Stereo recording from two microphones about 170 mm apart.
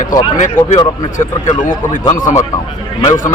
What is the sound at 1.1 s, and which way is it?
Speech, 45° left (ahead or behind).